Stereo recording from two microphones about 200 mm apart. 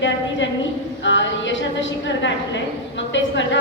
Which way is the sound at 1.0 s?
65° left (ahead or behind).